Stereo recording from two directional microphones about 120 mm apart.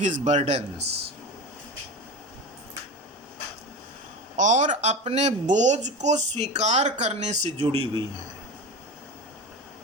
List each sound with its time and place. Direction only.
0.0 s speech: 80° right; by 0.9 s 65° right (ahead or behind)
4.4 s speech: 90° right; by 7.9 s 55° right (ahead or behind)